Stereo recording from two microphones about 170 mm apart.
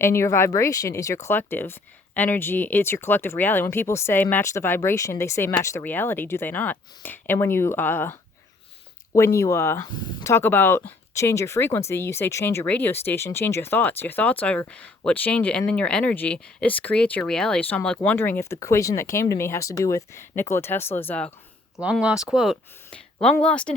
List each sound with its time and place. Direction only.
0.0 s speech: 15° left (ahead or behind)
21.8 s speech: 5° right (ahead or behind)